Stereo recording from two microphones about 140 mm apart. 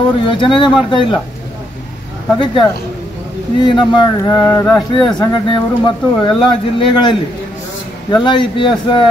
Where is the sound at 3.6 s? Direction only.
35° left (ahead or behind).